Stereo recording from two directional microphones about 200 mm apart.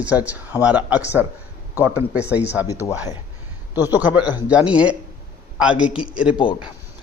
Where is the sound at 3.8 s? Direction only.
10° right (ahead or behind).